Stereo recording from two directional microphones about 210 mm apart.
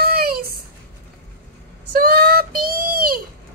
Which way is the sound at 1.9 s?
45° right (ahead or behind).